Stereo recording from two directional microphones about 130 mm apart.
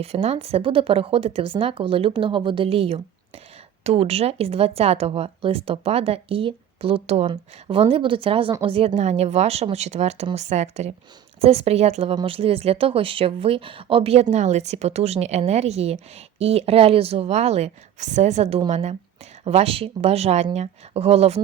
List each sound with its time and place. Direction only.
0.0 s speech: 55° right (ahead or behind)
9.0 s speech: 60° right (ahead or behind)
12.1 s speech: 45° right (ahead or behind); by 18.9 s 65° right (ahead or behind)
19.5 s speech: 50° right (ahead or behind)